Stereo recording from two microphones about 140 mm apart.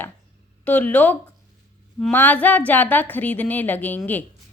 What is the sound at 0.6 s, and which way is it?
A woman's voice, 10° left (ahead or behind).